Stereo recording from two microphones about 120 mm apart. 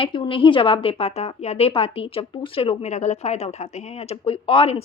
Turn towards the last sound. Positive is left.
turn(degrees=50)  # may be behind; listen again after turning